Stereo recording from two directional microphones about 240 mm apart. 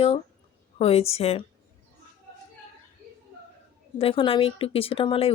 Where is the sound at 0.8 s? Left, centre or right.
Left.